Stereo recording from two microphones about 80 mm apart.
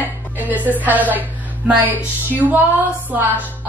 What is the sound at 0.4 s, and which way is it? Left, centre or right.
A woman's voice, right.